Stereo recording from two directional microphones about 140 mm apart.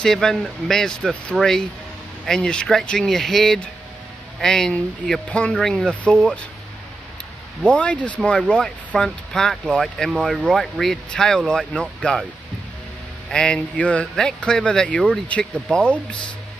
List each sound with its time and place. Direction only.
0.0 s speech: 5° left (ahead or behind)
7.6 s speech: 10° left (ahead or behind)
13.3 s speech: 5° left (ahead or behind)